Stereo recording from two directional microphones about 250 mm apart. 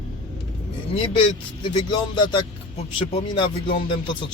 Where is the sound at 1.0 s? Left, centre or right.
Left.